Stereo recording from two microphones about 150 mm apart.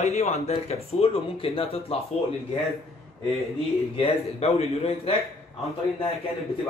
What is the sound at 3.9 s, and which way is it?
Speech, 40° left (ahead or behind).